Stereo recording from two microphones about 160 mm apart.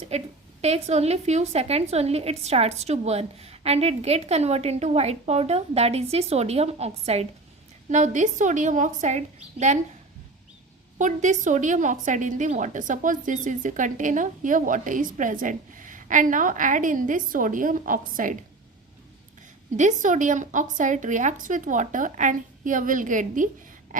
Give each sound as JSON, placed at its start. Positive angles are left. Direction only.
{"t": 0.1, "sound": "a woman's voice", "side_deg": -40}
{"t": 10.9, "sound": "a woman's voice", "side_deg": -50}
{"t": 19.7, "sound": "a woman's voice", "side_deg": -50}